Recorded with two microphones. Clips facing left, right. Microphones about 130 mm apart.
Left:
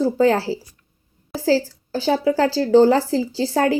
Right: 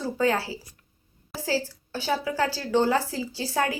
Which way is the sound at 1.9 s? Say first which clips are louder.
Left 9 dB; 30° left (ahead or behind).